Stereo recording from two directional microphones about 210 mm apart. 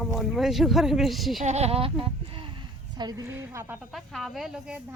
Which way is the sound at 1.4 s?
30° right (ahead or behind).